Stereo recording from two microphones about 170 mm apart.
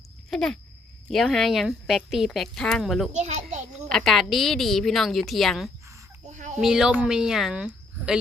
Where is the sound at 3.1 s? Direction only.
40° right (ahead or behind).